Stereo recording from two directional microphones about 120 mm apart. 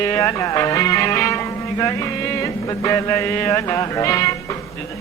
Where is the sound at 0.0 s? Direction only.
20° left (ahead or behind).